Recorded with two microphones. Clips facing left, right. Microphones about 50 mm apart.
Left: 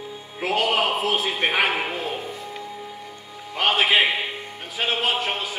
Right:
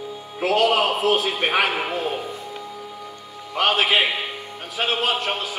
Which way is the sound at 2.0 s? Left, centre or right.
Centre.